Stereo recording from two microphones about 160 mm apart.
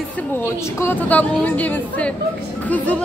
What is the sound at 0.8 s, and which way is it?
Speech, 10° left (ahead or behind).